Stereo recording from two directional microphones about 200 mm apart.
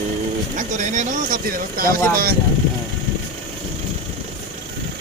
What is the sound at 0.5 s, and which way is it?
Speech, 40° right (ahead or behind).